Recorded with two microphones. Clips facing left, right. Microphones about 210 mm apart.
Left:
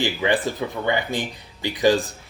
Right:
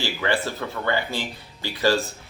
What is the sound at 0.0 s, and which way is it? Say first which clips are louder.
Speech: left 3 dB; 15° left (ahead or behind).